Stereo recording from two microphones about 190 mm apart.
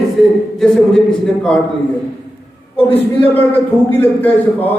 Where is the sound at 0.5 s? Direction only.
5° left (ahead or behind).